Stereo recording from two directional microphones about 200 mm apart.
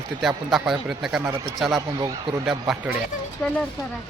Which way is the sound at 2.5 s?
Centre (ahead or behind).